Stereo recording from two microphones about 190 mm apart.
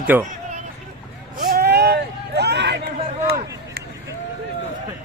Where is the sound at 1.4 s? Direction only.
55° right (ahead or behind).